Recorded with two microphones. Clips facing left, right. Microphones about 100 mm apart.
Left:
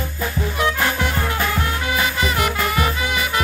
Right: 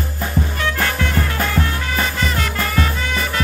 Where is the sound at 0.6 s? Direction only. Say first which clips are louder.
Left 3 dB; 20° left (ahead or behind).